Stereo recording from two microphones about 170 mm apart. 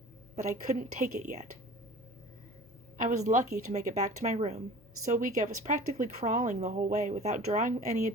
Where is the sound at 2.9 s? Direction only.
50° right (ahead or behind).